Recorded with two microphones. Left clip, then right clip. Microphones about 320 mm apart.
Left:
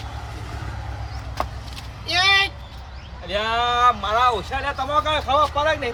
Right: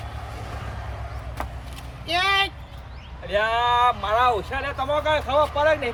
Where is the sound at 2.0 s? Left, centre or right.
Centre.